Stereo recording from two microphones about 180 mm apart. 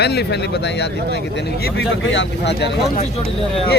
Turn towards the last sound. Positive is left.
turn(degrees=35)  # may be behind; listen again after turning